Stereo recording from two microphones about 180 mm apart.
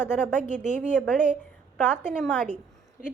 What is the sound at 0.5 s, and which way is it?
Speech, 45° right (ahead or behind).